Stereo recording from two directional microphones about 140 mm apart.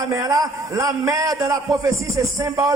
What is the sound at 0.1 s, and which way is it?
A man's voice, 25° right (ahead or behind).